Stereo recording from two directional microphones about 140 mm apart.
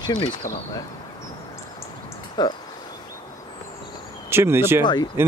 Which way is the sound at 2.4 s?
30° left (ahead or behind).